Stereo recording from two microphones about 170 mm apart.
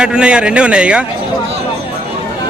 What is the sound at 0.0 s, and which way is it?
A man's voice, 5° right (ahead or behind).